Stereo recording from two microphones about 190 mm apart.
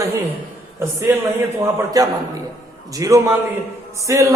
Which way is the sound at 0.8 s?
15° right (ahead or behind).